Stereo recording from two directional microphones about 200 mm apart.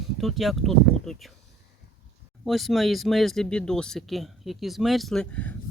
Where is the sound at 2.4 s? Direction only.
Centre (ahead or behind).